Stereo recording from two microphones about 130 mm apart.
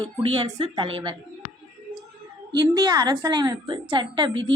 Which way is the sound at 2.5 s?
35° right (ahead or behind).